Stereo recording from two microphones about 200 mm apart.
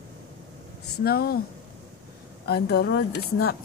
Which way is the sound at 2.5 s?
55° left (ahead or behind).